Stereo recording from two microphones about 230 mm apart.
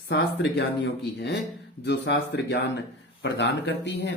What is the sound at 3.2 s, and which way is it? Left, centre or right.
Speech, left.